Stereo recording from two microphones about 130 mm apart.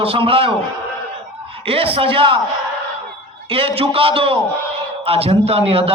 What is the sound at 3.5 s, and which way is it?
A man's voice, 45° right (ahead or behind).